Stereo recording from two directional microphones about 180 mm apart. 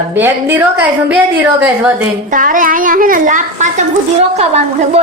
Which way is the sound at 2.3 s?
50° right (ahead or behind).